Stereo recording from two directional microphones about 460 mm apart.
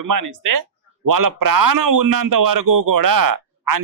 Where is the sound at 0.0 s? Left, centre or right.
Right.